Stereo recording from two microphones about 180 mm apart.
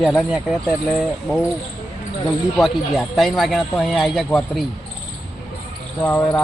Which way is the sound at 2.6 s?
Centre (ahead or behind).